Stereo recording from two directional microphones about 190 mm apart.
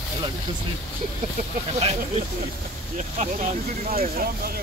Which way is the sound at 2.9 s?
40° right (ahead or behind).